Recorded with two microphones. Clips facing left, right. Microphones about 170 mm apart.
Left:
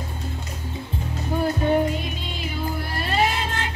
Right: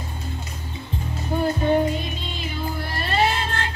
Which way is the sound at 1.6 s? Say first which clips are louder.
Right 1 dB; 5° left (ahead or behind).